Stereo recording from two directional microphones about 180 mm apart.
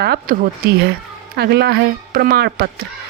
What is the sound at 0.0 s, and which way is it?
Speech, 65° right (ahead or behind).